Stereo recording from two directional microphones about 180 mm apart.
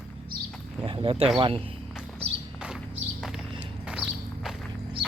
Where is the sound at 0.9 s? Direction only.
30° right (ahead or behind).